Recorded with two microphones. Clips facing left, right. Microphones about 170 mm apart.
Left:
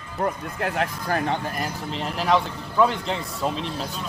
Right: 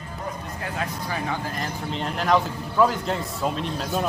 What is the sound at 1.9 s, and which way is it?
A man's voice, centre (ahead or behind).